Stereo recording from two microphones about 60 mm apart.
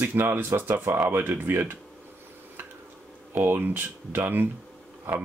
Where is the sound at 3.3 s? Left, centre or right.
Right.